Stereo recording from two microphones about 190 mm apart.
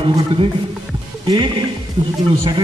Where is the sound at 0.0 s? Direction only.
25° right (ahead or behind).